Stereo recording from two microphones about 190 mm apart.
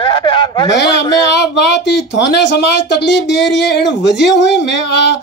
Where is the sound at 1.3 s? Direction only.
65° left (ahead or behind).